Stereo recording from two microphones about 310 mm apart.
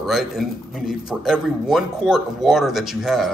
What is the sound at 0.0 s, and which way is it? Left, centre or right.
Speech, centre.